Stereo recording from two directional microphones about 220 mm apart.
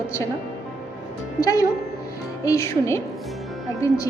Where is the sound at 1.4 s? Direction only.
15° left (ahead or behind).